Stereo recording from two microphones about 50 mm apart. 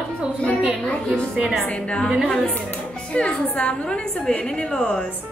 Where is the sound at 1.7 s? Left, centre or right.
Left.